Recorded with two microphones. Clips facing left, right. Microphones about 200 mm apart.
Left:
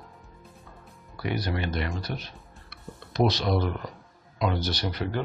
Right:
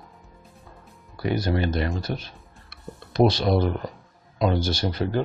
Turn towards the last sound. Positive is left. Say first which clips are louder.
# right 5 dB
turn(degrees=-30)  # may be behind; listen again after turning